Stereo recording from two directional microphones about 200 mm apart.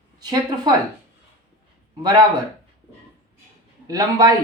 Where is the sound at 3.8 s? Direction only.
20° right (ahead or behind).